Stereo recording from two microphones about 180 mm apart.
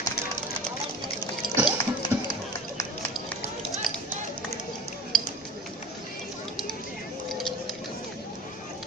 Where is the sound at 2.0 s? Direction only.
25° left (ahead or behind).